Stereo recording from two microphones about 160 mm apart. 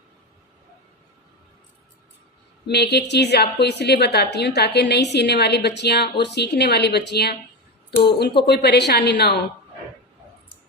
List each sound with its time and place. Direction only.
2.6 s a woman's voice: 90° left
8.4 s a woman's voice: 90° left